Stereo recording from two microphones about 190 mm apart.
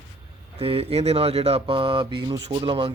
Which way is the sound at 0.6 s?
30° right (ahead or behind).